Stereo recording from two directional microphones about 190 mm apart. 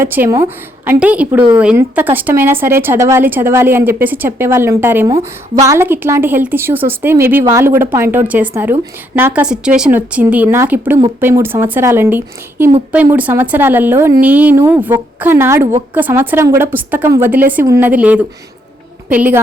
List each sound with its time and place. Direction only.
0.0 s a woman's voice: 10° right (ahead or behind)